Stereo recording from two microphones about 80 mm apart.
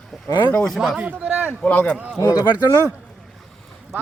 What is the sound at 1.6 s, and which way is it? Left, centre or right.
Speech, centre.